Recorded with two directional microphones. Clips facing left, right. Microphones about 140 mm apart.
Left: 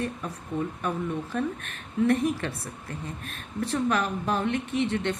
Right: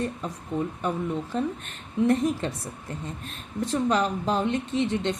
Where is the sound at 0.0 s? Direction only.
20° right (ahead or behind).